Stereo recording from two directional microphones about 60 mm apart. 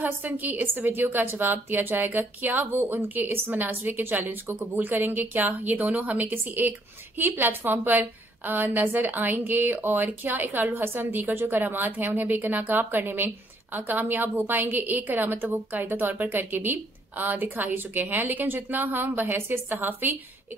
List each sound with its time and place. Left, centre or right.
0.0 s a woman's voice: right